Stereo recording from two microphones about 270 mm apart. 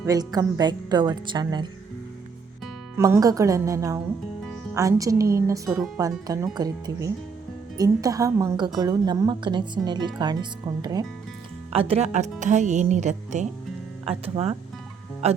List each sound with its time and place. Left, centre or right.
0.0 s a woman's voice: centre
3.0 s a woman's voice: centre
11.7 s speech: right
15.2 s speech: right